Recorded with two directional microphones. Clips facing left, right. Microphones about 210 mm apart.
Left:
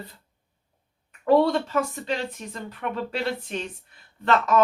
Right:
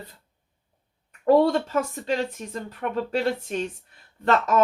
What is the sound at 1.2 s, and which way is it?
Speech, 45° right (ahead or behind).